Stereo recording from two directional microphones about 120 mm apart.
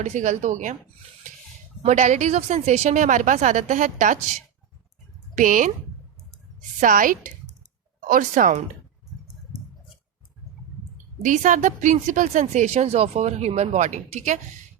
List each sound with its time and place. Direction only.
0.0 s a woman's voice: 75° right (ahead or behind); by 0.8 s 90° right
1.8 s a woman's voice: 80° right
5.4 s a woman's voice: 90° right
6.3 s a sound: 90° right
8.0 s a woman's voice: 90° right
10.9 s a woman's voice: 90° right